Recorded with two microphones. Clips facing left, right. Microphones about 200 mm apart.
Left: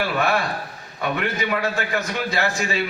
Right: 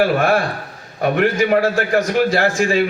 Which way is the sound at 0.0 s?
50° right (ahead or behind).